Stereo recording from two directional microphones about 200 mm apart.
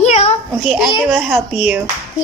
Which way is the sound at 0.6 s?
Centre (ahead or behind).